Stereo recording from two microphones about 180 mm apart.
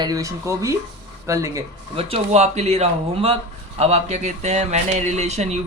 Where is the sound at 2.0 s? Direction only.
35° right (ahead or behind).